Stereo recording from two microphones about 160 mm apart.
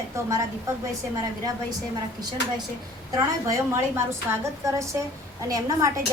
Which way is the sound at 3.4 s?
20° right (ahead or behind).